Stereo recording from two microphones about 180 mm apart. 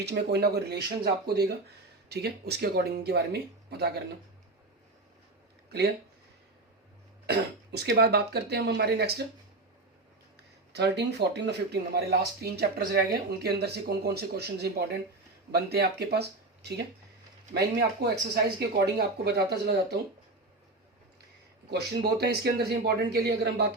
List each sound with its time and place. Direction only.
0.0 s speech: 65° right (ahead or behind)
7.3 s speech: 60° right (ahead or behind)
10.7 s speech: 70° right (ahead or behind)
17.5 s speech: 65° right (ahead or behind)
21.7 s speech: 60° right (ahead or behind)